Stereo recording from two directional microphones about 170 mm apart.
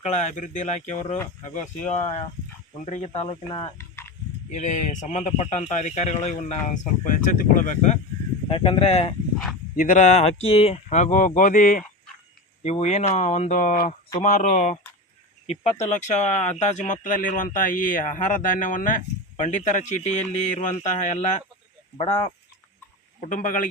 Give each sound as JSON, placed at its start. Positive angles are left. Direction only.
{"t": 0.0, "sound": "speech", "side_deg": 45}
{"t": 4.5, "sound": "speech", "side_deg": 45}
{"t": 8.4, "sound": "speech", "side_deg": 35}
{"t": 21.9, "sound": "speech", "side_deg": 35}
{"t": 23.2, "sound": "speech", "side_deg": 50}